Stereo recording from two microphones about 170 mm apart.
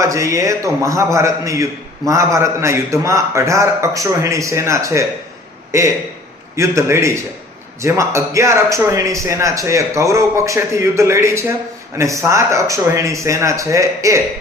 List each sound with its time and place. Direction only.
0.0 s a man's voice: 20° right (ahead or behind)